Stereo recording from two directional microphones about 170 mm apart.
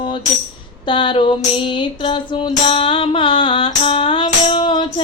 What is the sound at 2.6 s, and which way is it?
Music, 30° left (ahead or behind).